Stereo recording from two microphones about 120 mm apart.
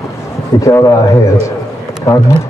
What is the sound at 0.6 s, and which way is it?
Speech, 25° left (ahead or behind).